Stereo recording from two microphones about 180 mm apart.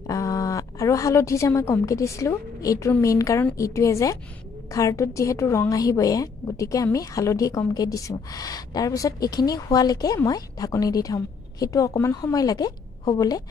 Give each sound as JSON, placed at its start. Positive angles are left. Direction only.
{"t": 0.0, "sound": "a woman's voice", "side_deg": 20}